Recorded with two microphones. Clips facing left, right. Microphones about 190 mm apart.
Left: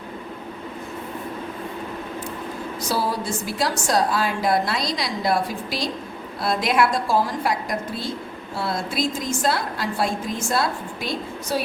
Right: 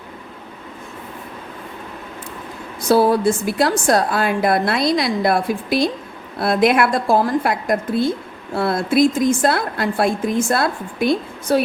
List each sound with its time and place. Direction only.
2.9 s a woman's voice: 55° right (ahead or behind)